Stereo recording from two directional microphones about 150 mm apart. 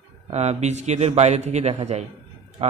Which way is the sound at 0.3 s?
45° right (ahead or behind).